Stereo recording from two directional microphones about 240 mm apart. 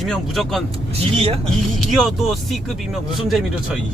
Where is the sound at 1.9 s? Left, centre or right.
Centre.